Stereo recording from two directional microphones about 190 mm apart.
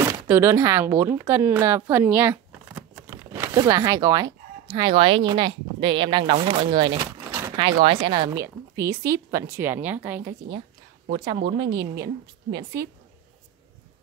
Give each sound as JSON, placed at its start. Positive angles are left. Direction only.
{"t": 0.0, "sound": "speech", "side_deg": -15}
{"t": 1.2, "sound": "a sound", "side_deg": -15}
{"t": 3.6, "sound": "a woman's voice", "side_deg": -20}
{"t": 11.1, "sound": "a woman's voice", "side_deg": -25}